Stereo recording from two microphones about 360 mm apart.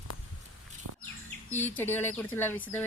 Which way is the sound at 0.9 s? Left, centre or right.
Right.